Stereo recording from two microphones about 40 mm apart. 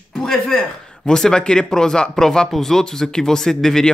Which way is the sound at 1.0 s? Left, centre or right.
Centre.